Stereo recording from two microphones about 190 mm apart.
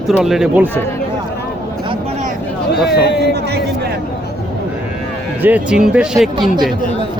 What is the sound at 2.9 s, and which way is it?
Speech, 60° left (ahead or behind).